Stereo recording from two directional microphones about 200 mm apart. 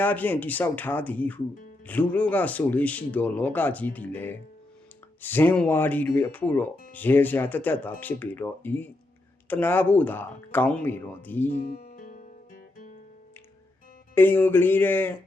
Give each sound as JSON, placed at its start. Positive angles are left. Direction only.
{"t": 0.0, "sound": "speech", "side_deg": 10}
{"t": 11.6, "sound": "music", "side_deg": 45}
{"t": 14.2, "sound": "speech", "side_deg": 10}